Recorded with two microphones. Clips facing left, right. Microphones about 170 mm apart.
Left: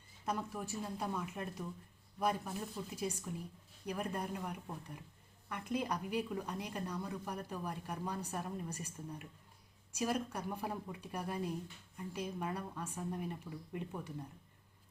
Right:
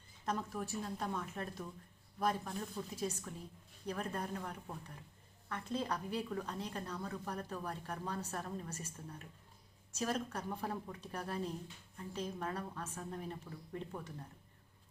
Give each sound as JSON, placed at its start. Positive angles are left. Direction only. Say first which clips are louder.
{"t": 0.3, "sound": "a woman's voice", "louder": "even", "side_deg": 10}